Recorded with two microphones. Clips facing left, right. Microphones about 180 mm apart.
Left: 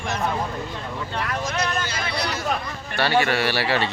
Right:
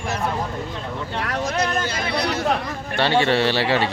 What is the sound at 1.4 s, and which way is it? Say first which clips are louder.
Vehicle: right 5 dB; 30° right (ahead or behind).